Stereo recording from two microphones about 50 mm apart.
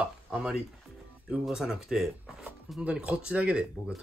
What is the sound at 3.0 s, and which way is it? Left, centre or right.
Speech, right.